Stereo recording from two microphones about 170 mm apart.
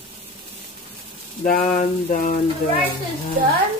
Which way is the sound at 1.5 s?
50° left (ahead or behind).